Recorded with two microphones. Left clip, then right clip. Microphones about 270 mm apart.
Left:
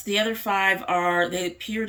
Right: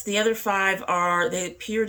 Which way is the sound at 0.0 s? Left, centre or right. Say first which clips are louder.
Right 1 dB; centre.